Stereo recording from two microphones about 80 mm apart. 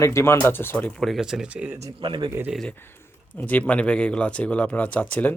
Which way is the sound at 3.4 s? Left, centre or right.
Left.